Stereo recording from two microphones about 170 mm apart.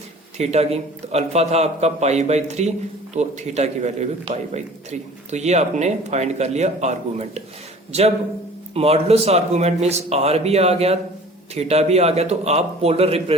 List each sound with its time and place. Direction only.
0.3 s a man's voice: 40° right (ahead or behind)
8.7 s a man's voice: 35° right (ahead or behind)